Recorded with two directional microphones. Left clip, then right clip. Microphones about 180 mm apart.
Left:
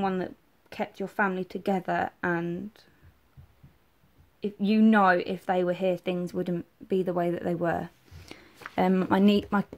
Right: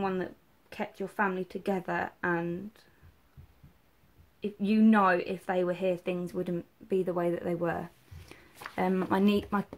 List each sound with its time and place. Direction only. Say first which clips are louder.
0.0 s a woman's voice: left 3 dB; 40° left (ahead or behind)
4.4 s a woman's voice: left 3 dB; 40° left (ahead or behind)